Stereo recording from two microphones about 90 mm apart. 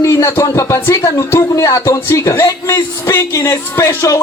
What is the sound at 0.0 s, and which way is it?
Speech, 35° left (ahead or behind).